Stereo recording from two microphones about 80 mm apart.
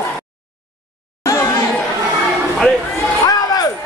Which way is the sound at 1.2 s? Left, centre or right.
Left.